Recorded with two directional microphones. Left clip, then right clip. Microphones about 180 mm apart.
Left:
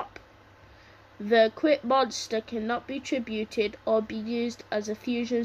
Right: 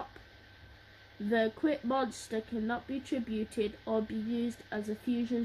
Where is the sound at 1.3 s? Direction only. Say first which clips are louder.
Left 9 dB; 5° right (ahead or behind).